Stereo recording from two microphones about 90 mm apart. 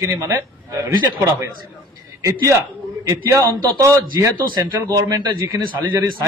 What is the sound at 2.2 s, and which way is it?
Speech, 35° right (ahead or behind).